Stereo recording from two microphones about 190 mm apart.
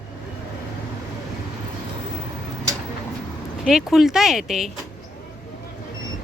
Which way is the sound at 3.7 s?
Centre (ahead or behind).